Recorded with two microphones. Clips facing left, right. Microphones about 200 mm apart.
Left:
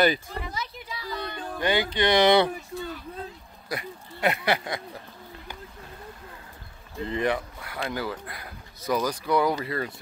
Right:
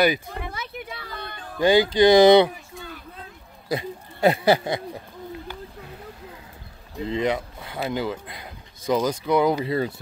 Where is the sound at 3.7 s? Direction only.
25° right (ahead or behind).